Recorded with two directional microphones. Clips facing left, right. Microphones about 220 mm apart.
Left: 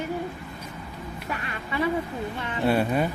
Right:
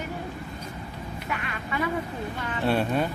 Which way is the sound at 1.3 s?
30° left (ahead or behind).